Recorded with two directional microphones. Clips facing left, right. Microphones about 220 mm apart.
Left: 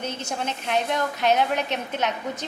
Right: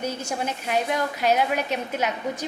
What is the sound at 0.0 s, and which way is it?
A woman's voice, 10° right (ahead or behind).